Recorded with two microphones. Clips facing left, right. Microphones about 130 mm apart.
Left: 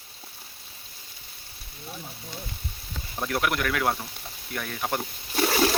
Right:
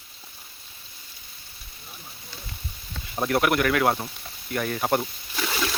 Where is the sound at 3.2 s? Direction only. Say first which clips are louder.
Right 5 dB; 5° right (ahead or behind).